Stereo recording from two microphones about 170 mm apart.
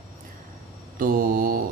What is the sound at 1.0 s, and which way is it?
Speech, 60° right (ahead or behind).